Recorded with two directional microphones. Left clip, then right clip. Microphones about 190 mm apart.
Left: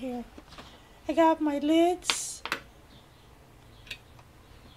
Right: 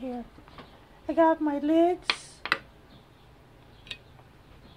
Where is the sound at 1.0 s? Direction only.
10° left (ahead or behind).